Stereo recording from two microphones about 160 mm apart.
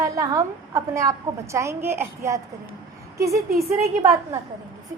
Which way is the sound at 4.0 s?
20° right (ahead or behind).